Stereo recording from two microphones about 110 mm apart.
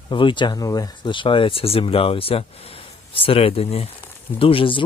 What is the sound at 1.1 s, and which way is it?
Speech, 50° left (ahead or behind).